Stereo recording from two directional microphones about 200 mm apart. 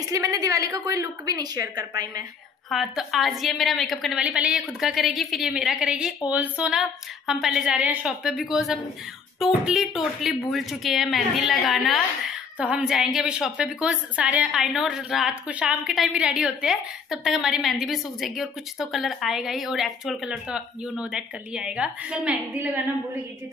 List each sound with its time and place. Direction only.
0.1 s a woman's voice: 15° right (ahead or behind)
2.7 s a woman's voice: centre (ahead or behind)